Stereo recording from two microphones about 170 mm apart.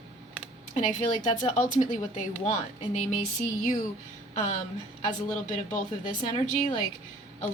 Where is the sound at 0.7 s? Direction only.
50° left (ahead or behind).